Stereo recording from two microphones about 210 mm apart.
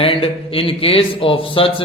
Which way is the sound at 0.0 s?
25° left (ahead or behind).